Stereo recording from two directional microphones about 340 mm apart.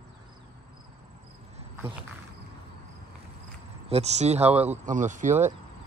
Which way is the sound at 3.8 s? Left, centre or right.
Centre.